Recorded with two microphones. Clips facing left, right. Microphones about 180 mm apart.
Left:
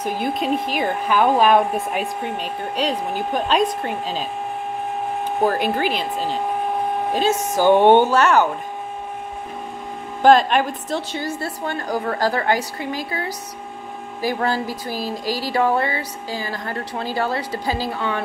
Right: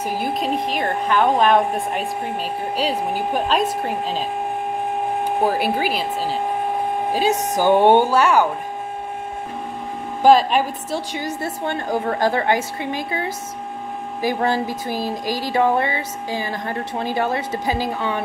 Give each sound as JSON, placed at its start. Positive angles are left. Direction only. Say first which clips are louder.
{"t": 0.0, "sound": "speech", "louder": "even", "side_deg": -5}
{"t": 10.2, "sound": "speech", "louder": "even", "side_deg": -5}